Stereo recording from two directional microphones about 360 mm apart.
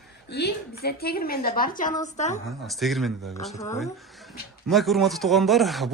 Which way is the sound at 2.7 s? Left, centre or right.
Centre.